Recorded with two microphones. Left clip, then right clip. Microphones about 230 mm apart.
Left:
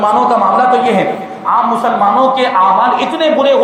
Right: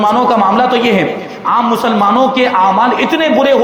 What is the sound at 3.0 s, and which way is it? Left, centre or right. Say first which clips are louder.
Speech: even; right.